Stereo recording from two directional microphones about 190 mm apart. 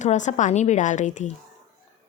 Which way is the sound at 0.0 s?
40° left (ahead or behind).